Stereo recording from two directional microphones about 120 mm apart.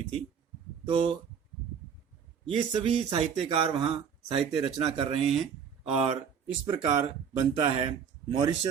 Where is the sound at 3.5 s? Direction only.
50° right (ahead or behind).